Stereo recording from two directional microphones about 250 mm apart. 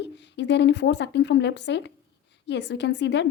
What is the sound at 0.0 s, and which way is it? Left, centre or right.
A woman's voice, left.